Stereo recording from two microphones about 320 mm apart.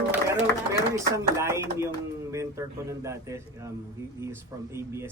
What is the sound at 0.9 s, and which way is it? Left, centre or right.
A woman's voice, centre.